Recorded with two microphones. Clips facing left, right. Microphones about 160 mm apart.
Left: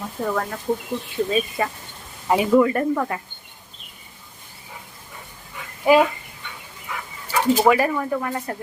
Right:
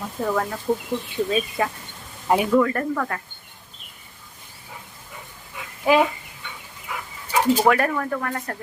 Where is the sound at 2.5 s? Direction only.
15° left (ahead or behind).